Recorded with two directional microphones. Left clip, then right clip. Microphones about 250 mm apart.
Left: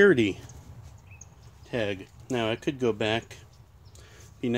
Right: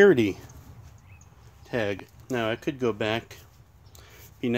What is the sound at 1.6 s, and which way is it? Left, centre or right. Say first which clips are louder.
Speech: right 2 dB; right.